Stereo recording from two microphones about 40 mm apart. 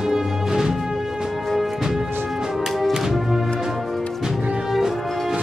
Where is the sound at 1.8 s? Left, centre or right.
Centre.